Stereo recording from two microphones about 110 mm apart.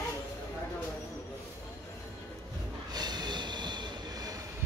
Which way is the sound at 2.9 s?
40° right (ahead or behind).